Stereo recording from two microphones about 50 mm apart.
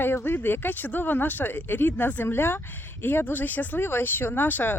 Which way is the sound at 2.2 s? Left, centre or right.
Left.